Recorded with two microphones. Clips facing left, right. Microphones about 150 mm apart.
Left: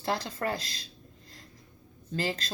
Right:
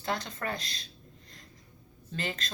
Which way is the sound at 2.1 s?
30° left (ahead or behind).